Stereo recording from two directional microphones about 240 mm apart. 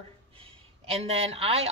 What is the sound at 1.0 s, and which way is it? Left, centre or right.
Speech, right.